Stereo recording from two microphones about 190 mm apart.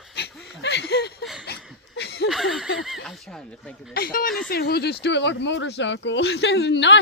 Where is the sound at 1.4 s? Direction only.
60° left (ahead or behind).